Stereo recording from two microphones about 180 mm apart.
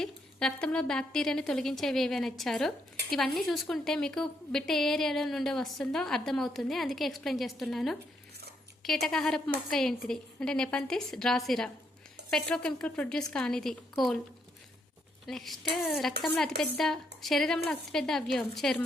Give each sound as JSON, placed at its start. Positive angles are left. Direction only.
{"t": 0.0, "sound": "a woman's voice", "side_deg": 5}
{"t": 15.3, "sound": "a woman's voice", "side_deg": 0}